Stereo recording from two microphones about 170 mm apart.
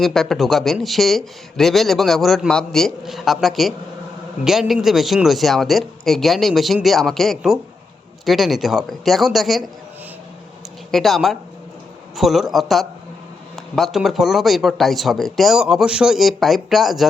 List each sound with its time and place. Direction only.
0.0 s speech: centre (ahead or behind)
10.9 s speech: centre (ahead or behind)